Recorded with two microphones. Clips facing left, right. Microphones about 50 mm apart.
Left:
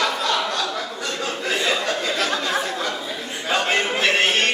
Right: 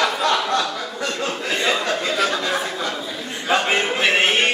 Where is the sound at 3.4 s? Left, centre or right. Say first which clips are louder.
Right 2 dB; centre.